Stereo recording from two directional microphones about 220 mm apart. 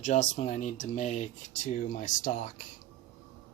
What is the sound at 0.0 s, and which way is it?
Speech, 35° left (ahead or behind).